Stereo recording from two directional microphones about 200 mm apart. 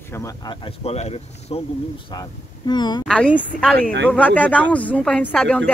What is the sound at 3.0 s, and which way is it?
Speech, 5° left (ahead or behind).